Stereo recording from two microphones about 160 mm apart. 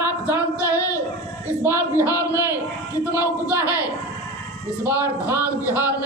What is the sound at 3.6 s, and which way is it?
Speech, 20° left (ahead or behind).